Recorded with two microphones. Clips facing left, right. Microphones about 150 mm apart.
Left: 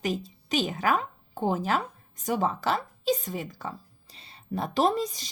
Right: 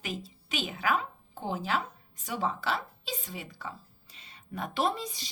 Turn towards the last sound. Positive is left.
turn(degrees=45)  # may be behind; listen again after turning